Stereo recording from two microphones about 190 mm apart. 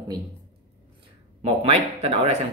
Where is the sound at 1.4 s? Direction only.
35° right (ahead or behind).